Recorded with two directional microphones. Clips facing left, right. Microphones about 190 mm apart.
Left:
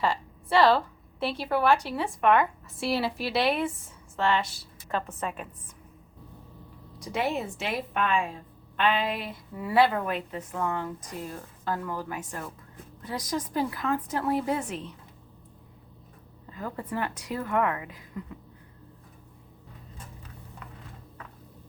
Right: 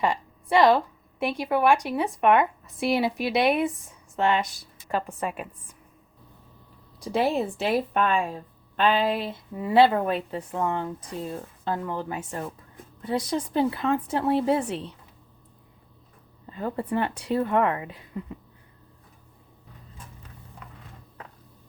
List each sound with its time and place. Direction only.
0.0 s a woman's voice: 15° right (ahead or behind)
7.0 s a woman's voice: 30° right (ahead or behind)
16.5 s a woman's voice: 25° right (ahead or behind)